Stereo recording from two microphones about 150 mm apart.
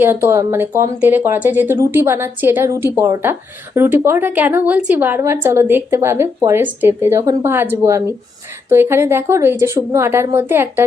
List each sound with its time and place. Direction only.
0.0 s speech: 15° right (ahead or behind)